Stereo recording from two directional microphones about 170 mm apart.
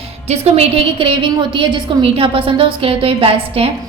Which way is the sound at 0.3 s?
40° right (ahead or behind).